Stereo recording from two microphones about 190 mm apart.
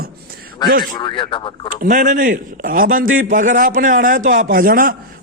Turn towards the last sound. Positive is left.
turn(degrees=-50)  # may be behind; listen again after turning